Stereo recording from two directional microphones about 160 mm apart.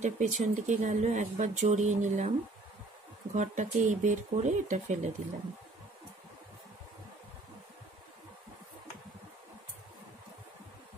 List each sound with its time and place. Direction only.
0.0 s speech: 45° right (ahead or behind)
3.3 s speech: 50° right (ahead or behind)